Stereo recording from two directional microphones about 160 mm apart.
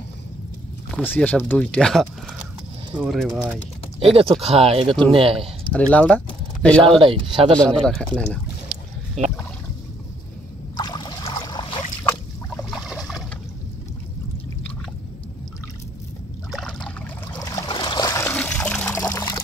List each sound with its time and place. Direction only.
0.9 s speech: 10° left (ahead or behind)
4.0 s speech: 35° right (ahead or behind)
5.7 s speech: 5° left (ahead or behind)
7.0 s speech: 30° right (ahead or behind)
7.5 s speech: 5° left (ahead or behind)
9.2 s a sound: 45° right (ahead or behind)
10.8 s a sound: 25° left (ahead or behind)
12.0 s boat: 15° left (ahead or behind)
12.7 s boat: centre (ahead or behind)
16.5 s rowboat: 5° left (ahead or behind)
17.0 s water: 20° left (ahead or behind)
18.9 s trickle: 20° left (ahead or behind)